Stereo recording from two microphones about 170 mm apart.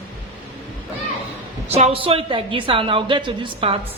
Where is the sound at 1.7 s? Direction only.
35° right (ahead or behind).